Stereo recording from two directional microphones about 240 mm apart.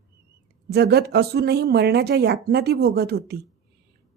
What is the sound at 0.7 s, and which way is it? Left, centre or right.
A woman's voice, right.